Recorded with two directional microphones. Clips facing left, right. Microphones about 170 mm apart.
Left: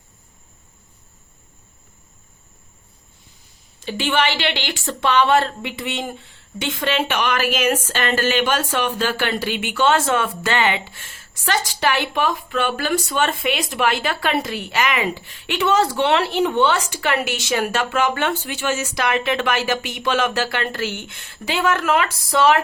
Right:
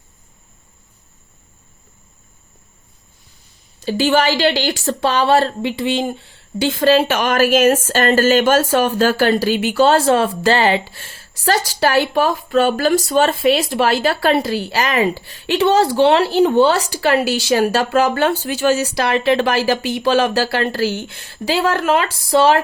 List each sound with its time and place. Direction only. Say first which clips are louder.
3.8 s speech: right 6 dB; 40° right (ahead or behind)